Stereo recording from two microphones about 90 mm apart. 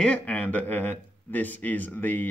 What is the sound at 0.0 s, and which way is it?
Speech, 15° left (ahead or behind).